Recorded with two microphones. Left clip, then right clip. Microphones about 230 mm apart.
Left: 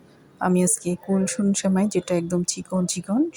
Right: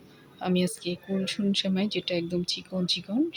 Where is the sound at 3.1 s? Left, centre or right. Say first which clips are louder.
Left 8 dB; centre.